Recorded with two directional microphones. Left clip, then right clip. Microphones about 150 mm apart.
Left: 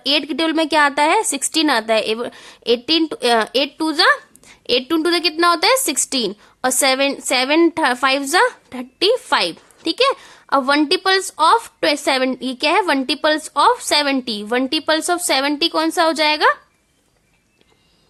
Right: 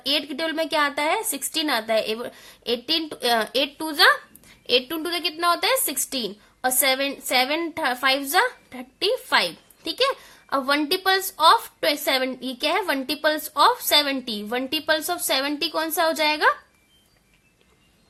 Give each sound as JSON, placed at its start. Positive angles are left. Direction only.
{"t": 0.0, "sound": "a woman's voice", "side_deg": 40}